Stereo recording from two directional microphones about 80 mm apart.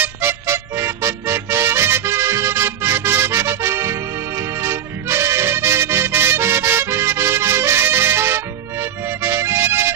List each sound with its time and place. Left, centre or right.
0.0 s music: right